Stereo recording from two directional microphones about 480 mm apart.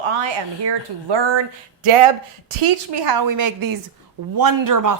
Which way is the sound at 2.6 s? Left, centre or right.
Right.